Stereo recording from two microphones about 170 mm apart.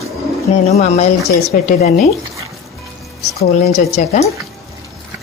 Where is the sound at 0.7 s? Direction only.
40° left (ahead or behind).